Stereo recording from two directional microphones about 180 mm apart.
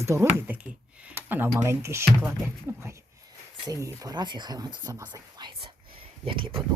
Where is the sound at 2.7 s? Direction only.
15° right (ahead or behind); by 6.6 s 30° right (ahead or behind).